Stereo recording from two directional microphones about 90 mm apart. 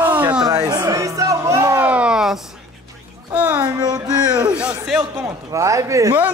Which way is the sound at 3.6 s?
45° right (ahead or behind).